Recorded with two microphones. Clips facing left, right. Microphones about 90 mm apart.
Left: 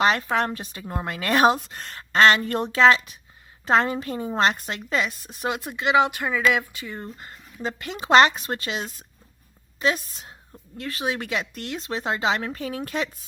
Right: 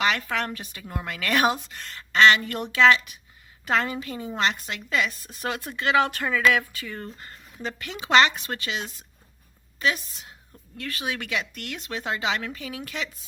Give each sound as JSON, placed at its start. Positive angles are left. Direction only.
{"t": 0.0, "sound": "a woman's voice", "side_deg": 30}
{"t": 5.3, "sound": "a woman's voice", "side_deg": 20}